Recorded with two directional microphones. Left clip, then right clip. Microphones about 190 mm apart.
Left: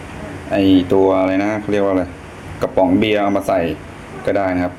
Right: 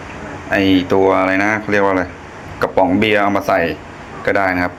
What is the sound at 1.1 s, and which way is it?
A man's voice, centre (ahead or behind).